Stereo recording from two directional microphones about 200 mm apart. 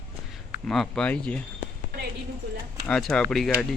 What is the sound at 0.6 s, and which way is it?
Speech, centre (ahead or behind).